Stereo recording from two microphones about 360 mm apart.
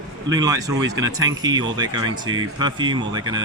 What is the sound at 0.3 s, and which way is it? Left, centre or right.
A man's voice, centre.